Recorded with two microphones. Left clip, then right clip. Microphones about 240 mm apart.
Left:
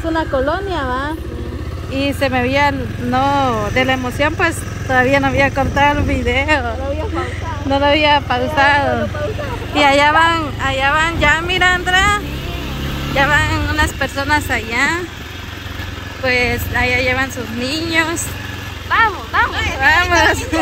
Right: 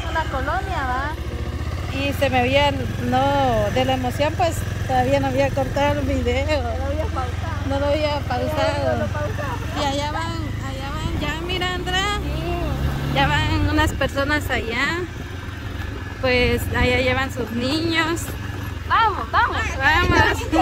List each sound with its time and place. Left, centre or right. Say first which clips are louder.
0.5 s a sound: left 5 dB; left
2.0 s speech: left 3 dB; centre
7.7 s speech: left 9 dB; centre
10.0 s speech: left 15 dB; left
11.0 s speech: left 14 dB; centre
16.3 s speech: left 3 dB; centre
18.9 s vehicle: left 4 dB; right
19.8 s speech: left 5 dB; centre